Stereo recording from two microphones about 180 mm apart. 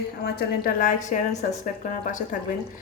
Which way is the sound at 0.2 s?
55° left (ahead or behind).